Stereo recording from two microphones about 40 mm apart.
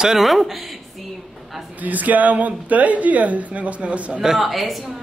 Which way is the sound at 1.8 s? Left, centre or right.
Right.